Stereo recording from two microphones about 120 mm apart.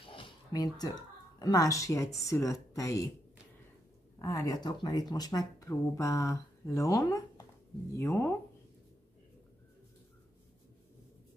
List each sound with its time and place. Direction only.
0.0 s a sound: 45° left (ahead or behind)
0.5 s speech: 35° left (ahead or behind)
4.2 s speech: 30° left (ahead or behind)